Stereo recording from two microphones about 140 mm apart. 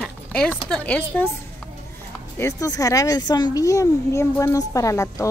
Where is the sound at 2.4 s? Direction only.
25° left (ahead or behind).